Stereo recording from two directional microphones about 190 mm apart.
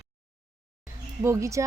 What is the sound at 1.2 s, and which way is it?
Speech, 15° right (ahead or behind).